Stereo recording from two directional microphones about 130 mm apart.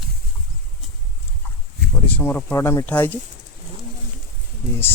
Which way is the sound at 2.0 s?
15° left (ahead or behind).